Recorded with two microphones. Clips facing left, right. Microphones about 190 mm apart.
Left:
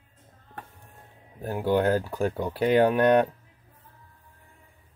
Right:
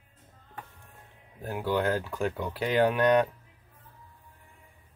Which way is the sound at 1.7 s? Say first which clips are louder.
Left 5 dB; 40° left (ahead or behind).